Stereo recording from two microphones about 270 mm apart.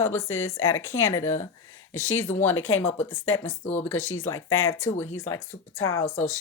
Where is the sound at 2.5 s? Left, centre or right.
Left.